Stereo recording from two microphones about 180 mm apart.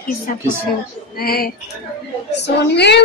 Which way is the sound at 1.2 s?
55° left (ahead or behind).